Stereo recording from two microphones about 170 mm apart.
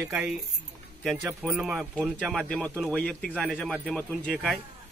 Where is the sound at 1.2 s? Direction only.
10° right (ahead or behind).